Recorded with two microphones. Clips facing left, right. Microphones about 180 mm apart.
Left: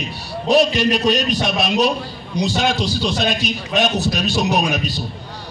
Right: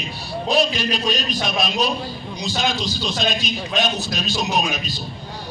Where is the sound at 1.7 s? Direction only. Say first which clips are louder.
Left 5 dB; 70° left (ahead or behind).